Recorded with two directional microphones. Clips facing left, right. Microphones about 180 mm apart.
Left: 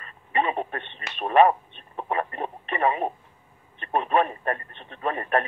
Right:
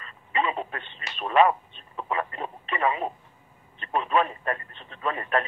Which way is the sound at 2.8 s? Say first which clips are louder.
Left 2 dB; 45° left (ahead or behind).